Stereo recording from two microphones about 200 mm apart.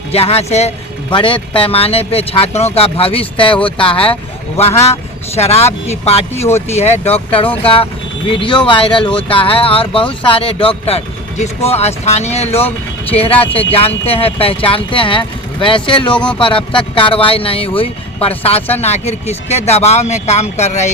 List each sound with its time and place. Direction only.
0.1 s speech: 30° left (ahead or behind)
16.1 s speech: 5° left (ahead or behind)
16.4 s speech: 25° left (ahead or behind)